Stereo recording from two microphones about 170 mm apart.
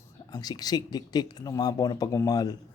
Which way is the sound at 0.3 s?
25° left (ahead or behind).